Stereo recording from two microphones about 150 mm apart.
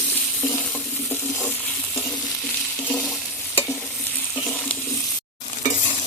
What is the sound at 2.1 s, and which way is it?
Stir, centre (ahead or behind).